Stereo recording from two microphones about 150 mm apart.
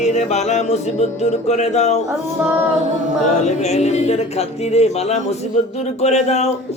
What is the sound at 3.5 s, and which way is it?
Music, 50° left (ahead or behind).